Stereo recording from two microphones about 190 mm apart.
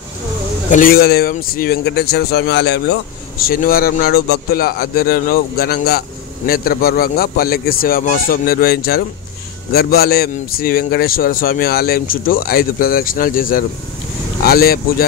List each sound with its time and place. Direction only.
0.7 s a man's voice: 45° left (ahead or behind); by 2.8 s 60° left (ahead or behind)
3.3 s a man's voice: 50° left (ahead or behind)